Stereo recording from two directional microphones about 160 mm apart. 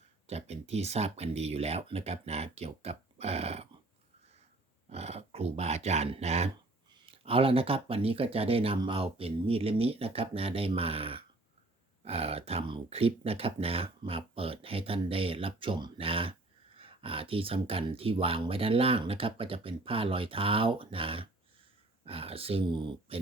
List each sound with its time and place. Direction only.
0.3 s speech: 40° right (ahead or behind)
4.9 s speech: 40° right (ahead or behind)